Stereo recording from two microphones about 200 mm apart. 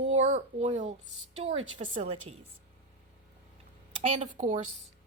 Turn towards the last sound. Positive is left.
turn(degrees=-40)  # may be behind; listen again after turning